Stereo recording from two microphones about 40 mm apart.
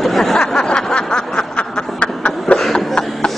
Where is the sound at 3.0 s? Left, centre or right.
Left.